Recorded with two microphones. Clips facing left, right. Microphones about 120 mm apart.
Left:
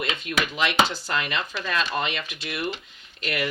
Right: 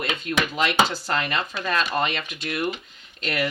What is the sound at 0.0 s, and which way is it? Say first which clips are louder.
Speech: right 2 dB; 40° right (ahead or behind).